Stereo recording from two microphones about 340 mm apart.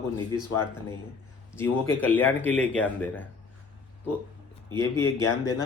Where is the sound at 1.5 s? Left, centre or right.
Centre.